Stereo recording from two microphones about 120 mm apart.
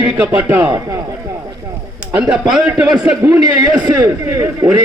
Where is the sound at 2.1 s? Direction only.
5° right (ahead or behind).